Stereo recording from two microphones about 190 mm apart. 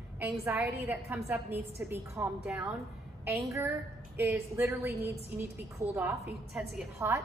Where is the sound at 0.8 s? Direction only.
10° right (ahead or behind).